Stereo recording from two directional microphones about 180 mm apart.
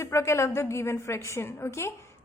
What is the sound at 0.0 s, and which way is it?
A woman's voice, 15° left (ahead or behind).